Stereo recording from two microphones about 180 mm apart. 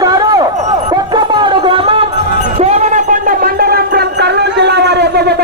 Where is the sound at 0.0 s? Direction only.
20° right (ahead or behind).